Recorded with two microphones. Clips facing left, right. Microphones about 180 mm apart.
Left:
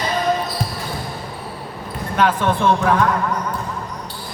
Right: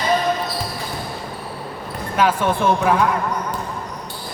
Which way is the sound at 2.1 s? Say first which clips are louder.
Even; 10° right (ahead or behind).